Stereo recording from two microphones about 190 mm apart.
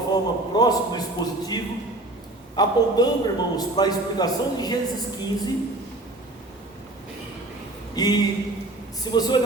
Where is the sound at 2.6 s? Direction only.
20° left (ahead or behind).